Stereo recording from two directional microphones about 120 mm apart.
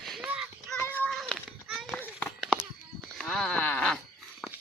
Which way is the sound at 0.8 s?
15° left (ahead or behind).